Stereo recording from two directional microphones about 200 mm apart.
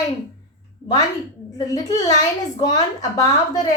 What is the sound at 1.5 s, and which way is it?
A woman's voice, 15° left (ahead or behind).